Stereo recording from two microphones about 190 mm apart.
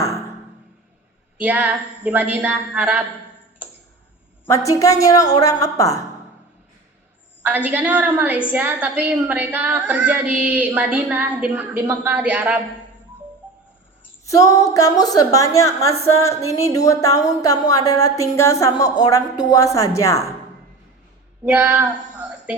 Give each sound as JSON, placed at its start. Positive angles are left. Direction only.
{"t": 1.4, "sound": "a woman's voice", "side_deg": -10}
{"t": 4.4, "sound": "a woman's voice", "side_deg": 15}
{"t": 7.4, "sound": "a woman's voice", "side_deg": -10}
{"t": 14.3, "sound": "a woman's voice", "side_deg": 15}
{"t": 21.4, "sound": "a woman's voice", "side_deg": -10}
{"t": 22.2, "sound": "music", "side_deg": -5}